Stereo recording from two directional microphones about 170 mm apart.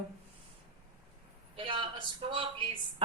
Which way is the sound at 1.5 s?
30° right (ahead or behind).